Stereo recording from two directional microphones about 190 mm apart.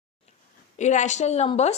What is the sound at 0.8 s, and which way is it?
Speech, 40° left (ahead or behind).